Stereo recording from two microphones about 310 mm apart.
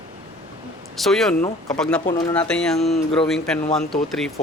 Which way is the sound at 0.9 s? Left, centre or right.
Centre.